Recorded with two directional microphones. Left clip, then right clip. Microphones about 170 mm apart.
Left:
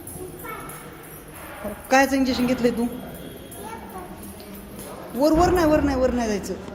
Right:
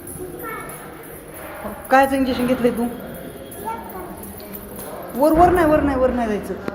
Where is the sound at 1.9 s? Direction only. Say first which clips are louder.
Right 3 dB; 25° left (ahead or behind).